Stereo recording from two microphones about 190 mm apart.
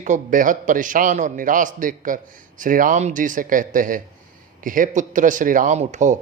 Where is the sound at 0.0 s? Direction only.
40° right (ahead or behind).